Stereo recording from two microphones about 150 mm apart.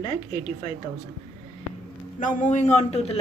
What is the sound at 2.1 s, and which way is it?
A man's voice, 55° left (ahead or behind).